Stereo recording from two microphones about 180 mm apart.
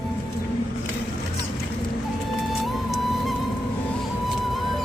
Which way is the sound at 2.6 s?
Centre (ahead or behind).